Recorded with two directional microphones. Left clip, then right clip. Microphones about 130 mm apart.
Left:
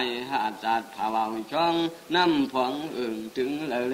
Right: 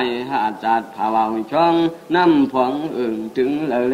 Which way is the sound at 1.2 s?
40° right (ahead or behind).